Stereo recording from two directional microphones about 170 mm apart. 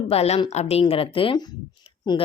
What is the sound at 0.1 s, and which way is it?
A woman's voice, 35° left (ahead or behind).